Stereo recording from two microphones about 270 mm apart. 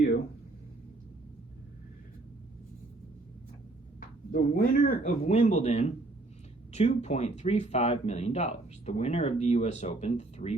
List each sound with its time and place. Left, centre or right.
4.3 s speech: left